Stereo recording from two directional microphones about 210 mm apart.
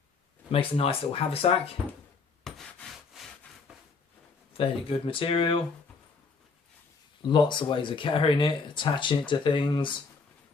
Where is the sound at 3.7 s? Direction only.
5° right (ahead or behind).